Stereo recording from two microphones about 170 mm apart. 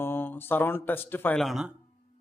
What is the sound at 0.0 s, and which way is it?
A man's voice, 10° left (ahead or behind).